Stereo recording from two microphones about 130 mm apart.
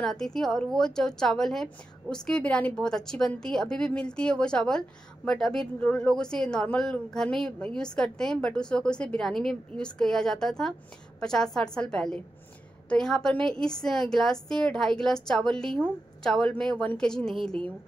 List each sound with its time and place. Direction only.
0.0 s a woman's voice: 5° left (ahead or behind)